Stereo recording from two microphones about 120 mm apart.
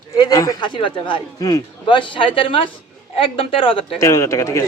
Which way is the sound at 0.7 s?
45° left (ahead or behind).